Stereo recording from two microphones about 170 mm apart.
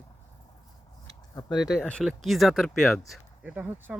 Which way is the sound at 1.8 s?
5° left (ahead or behind).